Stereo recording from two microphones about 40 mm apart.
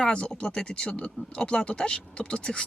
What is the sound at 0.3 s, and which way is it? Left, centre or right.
Speech, centre.